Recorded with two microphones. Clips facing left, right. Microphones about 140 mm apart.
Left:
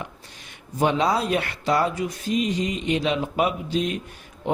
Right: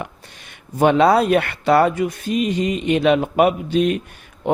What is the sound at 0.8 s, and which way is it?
Speech, 60° right (ahead or behind).